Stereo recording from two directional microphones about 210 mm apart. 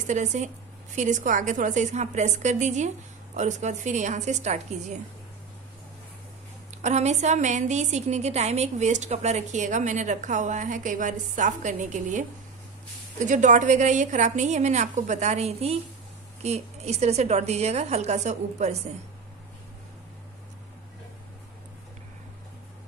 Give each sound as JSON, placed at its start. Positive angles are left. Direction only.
{"t": 0.0, "sound": "a woman's voice", "side_deg": -35}
{"t": 6.7, "sound": "a woman's voice", "side_deg": -35}